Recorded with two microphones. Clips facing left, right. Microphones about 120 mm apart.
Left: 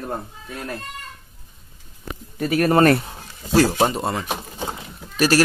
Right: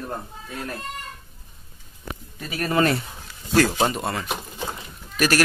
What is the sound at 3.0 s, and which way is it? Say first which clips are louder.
Speech: left 3 dB; 35° left (ahead or behind).